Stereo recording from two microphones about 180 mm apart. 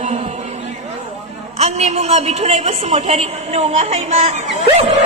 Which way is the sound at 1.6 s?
35° right (ahead or behind).